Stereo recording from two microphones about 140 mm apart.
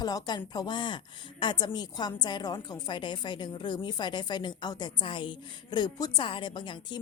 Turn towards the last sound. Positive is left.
turn(degrees=35)  # may be behind; listen again after turning